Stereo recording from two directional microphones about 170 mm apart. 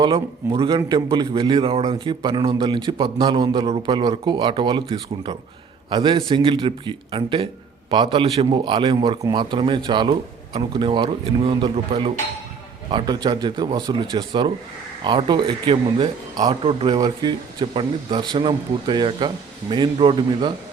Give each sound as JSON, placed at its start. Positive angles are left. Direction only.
{"t": 0.0, "sound": "a man's voice", "side_deg": -25}